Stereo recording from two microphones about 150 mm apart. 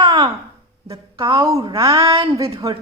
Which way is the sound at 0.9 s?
35° right (ahead or behind).